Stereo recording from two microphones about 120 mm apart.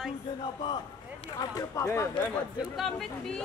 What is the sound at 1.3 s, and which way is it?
Speech, 30° left (ahead or behind).